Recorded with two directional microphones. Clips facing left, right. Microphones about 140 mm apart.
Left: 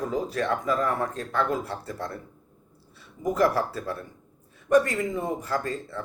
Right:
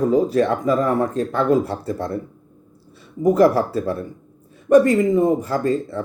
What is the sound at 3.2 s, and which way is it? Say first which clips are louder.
Speech: right 9 dB; 30° right (ahead or behind).